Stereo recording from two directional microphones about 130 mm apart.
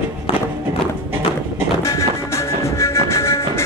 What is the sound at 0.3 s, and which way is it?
Music, 45° left (ahead or behind).